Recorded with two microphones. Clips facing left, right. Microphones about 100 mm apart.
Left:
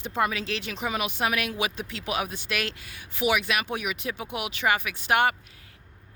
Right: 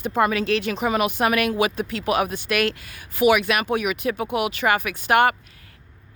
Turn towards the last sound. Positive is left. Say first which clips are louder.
# right 5 dB
turn(degrees=-55)  # may be behind; listen again after turning